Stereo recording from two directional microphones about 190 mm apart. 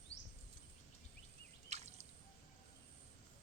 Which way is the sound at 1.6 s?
35° right (ahead or behind).